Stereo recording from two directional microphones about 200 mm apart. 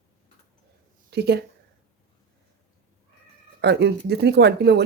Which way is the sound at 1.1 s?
55° right (ahead or behind).